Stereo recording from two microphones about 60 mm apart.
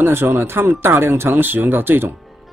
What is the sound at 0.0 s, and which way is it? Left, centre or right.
Speech, right.